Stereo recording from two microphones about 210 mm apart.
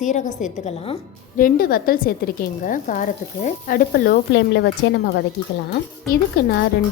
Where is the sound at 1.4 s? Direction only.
45° left (ahead or behind).